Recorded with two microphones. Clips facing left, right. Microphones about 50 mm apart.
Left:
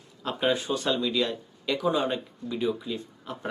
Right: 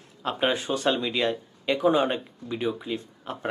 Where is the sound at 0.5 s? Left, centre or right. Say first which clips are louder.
Right 2 dB; right.